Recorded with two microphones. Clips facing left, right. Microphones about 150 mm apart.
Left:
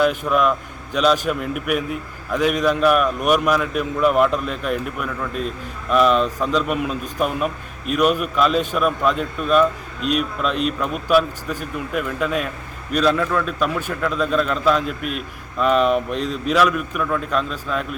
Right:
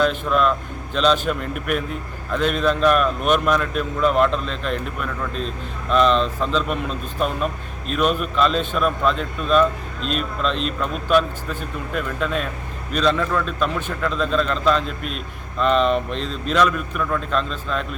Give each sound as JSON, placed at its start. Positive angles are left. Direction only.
{"t": 0.0, "sound": "speech", "side_deg": 10}